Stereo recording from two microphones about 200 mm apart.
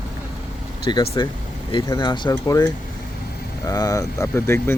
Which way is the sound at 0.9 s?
20° left (ahead or behind).